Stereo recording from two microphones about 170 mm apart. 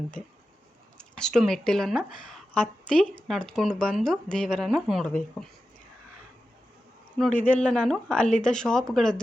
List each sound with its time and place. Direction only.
0.9 s a woman's voice: 5° left (ahead or behind)
7.2 s speech: 5° left (ahead or behind)